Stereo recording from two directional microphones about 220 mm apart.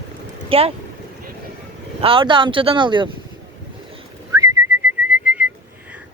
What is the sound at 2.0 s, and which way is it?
Speech, 25° right (ahead or behind).